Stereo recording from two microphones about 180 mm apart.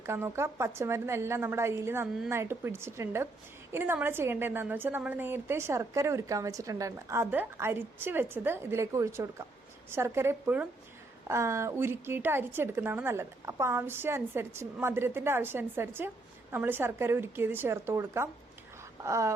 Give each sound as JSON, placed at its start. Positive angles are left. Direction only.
{"t": 0.0, "sound": "a woman's voice", "side_deg": -15}